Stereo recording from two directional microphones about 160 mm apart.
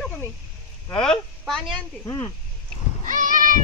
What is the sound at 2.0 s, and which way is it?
Speech, 20° left (ahead or behind).